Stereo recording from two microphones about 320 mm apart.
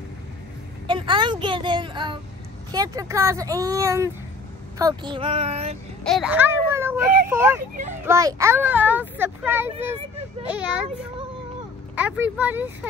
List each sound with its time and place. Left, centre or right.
0.8 s a sound: centre
2.7 s a child's voice: centre
6.0 s a child's voice: centre
7.7 s a child's voice: right
8.0 s a child's voice: centre
11.9 s speech: centre